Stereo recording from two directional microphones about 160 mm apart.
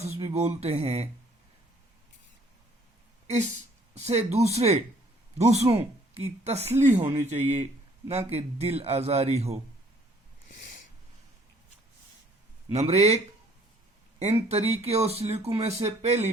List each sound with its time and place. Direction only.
0.0 s speech: 40° right (ahead or behind)
3.9 s a man's voice: 40° right (ahead or behind)
12.7 s a man's voice: 40° right (ahead or behind)